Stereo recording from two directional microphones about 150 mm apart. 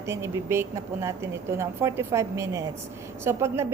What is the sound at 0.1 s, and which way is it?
A woman's voice, 20° right (ahead or behind).